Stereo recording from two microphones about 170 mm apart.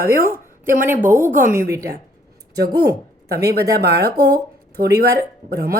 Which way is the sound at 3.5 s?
70° right (ahead or behind).